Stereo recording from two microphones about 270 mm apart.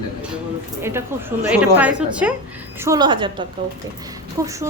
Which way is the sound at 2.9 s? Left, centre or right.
Centre.